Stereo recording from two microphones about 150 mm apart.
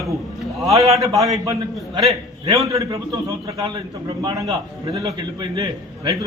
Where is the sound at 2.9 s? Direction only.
35° right (ahead or behind).